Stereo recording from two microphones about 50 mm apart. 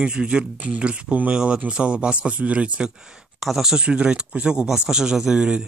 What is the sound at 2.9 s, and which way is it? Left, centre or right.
Speech, centre.